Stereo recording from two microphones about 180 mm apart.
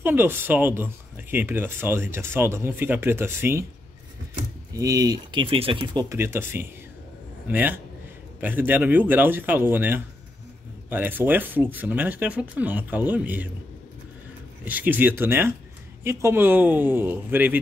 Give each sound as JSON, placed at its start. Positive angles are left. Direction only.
{"t": 0.0, "sound": "speech", "side_deg": -10}
{"t": 4.7, "sound": "speech", "side_deg": -20}
{"t": 6.0, "sound": "speech", "side_deg": -15}
{"t": 14.6, "sound": "speech", "side_deg": -10}